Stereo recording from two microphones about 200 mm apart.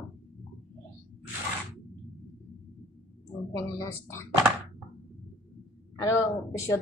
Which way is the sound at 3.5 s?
15° left (ahead or behind).